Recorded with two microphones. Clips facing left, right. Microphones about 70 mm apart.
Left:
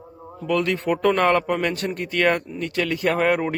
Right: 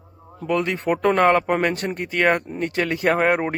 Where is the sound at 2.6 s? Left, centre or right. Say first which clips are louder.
Right 1 dB; right.